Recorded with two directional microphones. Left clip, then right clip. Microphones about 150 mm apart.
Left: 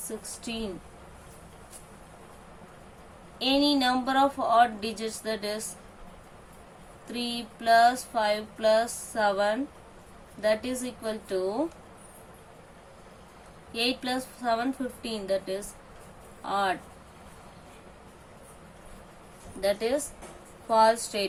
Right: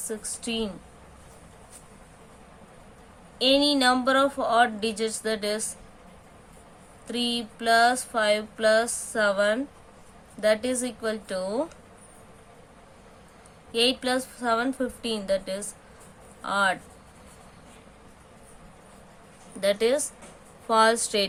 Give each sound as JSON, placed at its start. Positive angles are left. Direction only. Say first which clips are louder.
{"t": 3.3, "sound": "speech", "louder": "right 3 dB", "side_deg": -90}
{"t": 7.1, "sound": "speech", "louder": "right 5 dB", "side_deg": -90}
{"t": 13.7, "sound": "speech", "louder": "right 5 dB", "side_deg": -90}
{"t": 19.6, "sound": "speech", "louder": "right 4 dB", "side_deg": -90}